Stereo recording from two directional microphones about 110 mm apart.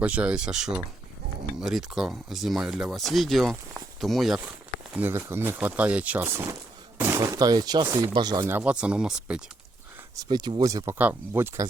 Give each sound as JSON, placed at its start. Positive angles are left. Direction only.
{"t": 0.0, "sound": "speech", "side_deg": -10}
{"t": 5.1, "sound": "speech", "side_deg": -20}
{"t": 8.4, "sound": "speech", "side_deg": -15}
{"t": 10.2, "sound": "speech", "side_deg": -45}
{"t": 10.9, "sound": "speech", "side_deg": -20}